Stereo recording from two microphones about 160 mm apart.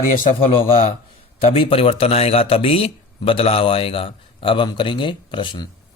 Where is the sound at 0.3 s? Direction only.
35° left (ahead or behind).